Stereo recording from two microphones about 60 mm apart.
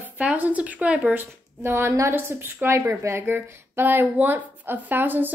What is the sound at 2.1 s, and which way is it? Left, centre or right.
Speech, right.